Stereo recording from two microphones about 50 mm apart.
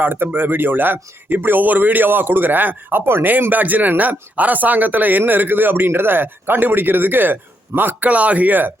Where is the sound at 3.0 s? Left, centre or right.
Right.